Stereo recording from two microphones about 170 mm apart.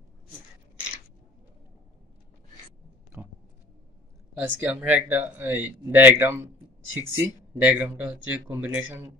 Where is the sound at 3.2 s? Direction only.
10° right (ahead or behind).